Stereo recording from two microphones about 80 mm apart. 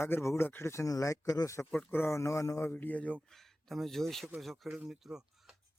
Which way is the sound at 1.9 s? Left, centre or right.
Left.